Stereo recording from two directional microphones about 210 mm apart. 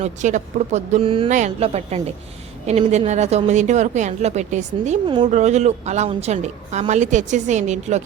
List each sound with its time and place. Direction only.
0.0 s speech: 35° right (ahead or behind)
1.3 s speech: 35° right (ahead or behind)